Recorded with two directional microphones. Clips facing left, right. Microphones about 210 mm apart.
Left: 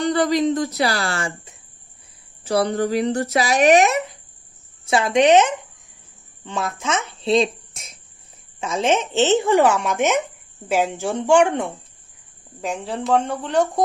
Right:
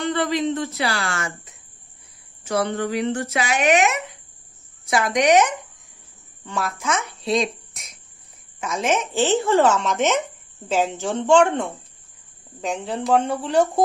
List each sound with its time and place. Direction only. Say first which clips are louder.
0.0 s speech: left 4 dB; 35° left (ahead or behind)
0.8 s a sound: left 3 dB; 40° left (ahead or behind)
4.9 s speech: left 3 dB; 30° left (ahead or behind)
9.2 s speech: left 1 dB; 20° left (ahead or behind)
12.6 s speech: even; centre (ahead or behind)